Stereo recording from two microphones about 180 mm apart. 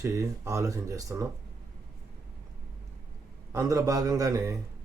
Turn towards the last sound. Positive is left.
turn(degrees=-20)  # may be behind; listen again after turning